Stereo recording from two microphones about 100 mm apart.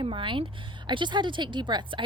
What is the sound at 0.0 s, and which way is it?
Speech, 60° right (ahead or behind).